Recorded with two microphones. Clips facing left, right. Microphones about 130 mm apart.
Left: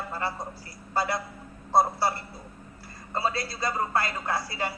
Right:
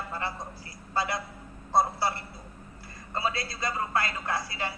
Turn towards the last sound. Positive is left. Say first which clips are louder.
# left 2 dB
turn(degrees=25)  # may be behind; listen again after turning